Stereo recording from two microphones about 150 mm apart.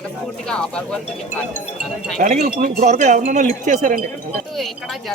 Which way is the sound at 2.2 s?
65° right (ahead or behind).